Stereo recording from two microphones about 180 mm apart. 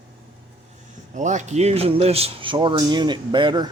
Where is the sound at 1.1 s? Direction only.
40° right (ahead or behind); by 3.6 s 25° right (ahead or behind).